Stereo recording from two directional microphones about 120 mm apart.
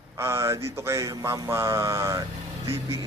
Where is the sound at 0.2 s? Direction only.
20° right (ahead or behind).